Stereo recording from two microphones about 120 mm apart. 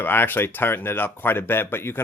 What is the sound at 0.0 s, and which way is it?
Speech, 15° left (ahead or behind).